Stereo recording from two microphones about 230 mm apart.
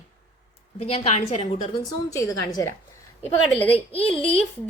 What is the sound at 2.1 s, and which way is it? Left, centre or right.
Speech, centre.